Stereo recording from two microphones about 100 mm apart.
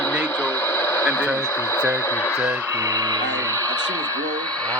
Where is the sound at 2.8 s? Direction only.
35° right (ahead or behind).